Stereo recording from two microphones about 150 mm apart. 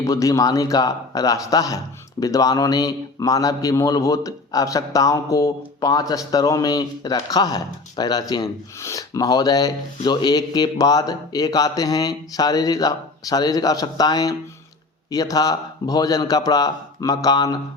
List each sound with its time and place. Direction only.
0.0 s a man's voice: 20° left (ahead or behind)